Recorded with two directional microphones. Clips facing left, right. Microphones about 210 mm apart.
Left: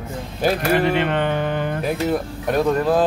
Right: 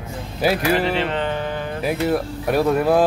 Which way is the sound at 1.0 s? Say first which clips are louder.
Left 2 dB; 55° left (ahead or behind).